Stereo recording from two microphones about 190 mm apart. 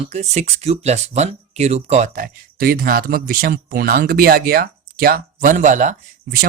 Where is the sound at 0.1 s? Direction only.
35° right (ahead or behind).